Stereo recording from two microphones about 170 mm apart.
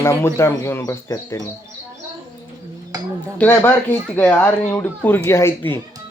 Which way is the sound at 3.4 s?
10° left (ahead or behind).